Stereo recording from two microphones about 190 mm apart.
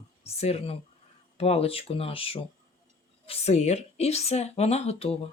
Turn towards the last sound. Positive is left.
turn(degrees=30)  # may be behind; listen again after turning